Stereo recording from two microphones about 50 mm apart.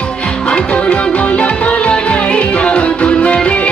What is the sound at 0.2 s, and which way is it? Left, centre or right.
Music, left.